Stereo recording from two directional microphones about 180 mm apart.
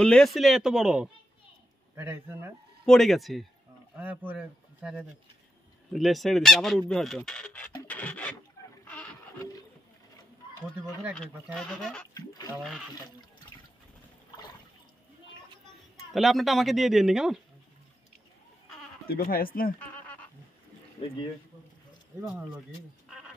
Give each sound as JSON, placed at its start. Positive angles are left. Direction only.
{"t": 0.0, "sound": "speech", "side_deg": 5}
{"t": 2.8, "sound": "speech", "side_deg": 0}
{"t": 7.8, "sound": "filing", "side_deg": 10}
{"t": 8.8, "sound": "a sound", "side_deg": 10}
{"t": 11.5, "sound": "speech", "side_deg": 5}
{"t": 12.1, "sound": "speech", "side_deg": 20}
{"t": 16.1, "sound": "speech", "side_deg": 0}
{"t": 19.0, "sound": "speech", "side_deg": 55}
{"t": 19.8, "sound": "frog", "side_deg": 10}
{"t": 21.0, "sound": "speech", "side_deg": 30}